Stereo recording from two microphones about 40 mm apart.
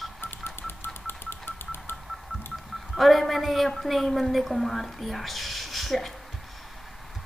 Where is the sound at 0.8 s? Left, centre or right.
Left.